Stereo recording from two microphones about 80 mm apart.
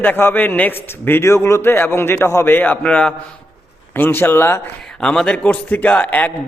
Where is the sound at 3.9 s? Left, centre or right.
Left.